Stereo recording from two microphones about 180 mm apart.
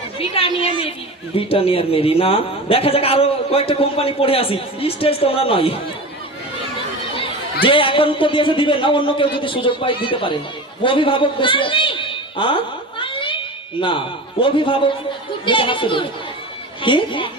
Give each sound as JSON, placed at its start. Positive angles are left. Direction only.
{"t": 0.2, "sound": "a man's voice", "side_deg": 30}
{"t": 7.6, "sound": "a man's voice", "side_deg": 30}
{"t": 13.0, "sound": "a sound", "side_deg": 30}
{"t": 14.4, "sound": "a man's voice", "side_deg": 30}